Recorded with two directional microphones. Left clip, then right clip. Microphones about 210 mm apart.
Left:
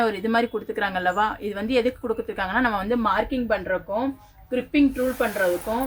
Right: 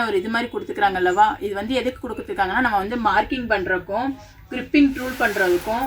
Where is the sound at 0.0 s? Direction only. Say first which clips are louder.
Even; 45° left (ahead or behind).